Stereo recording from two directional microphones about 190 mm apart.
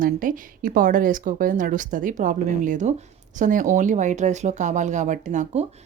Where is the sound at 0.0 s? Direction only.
45° right (ahead or behind).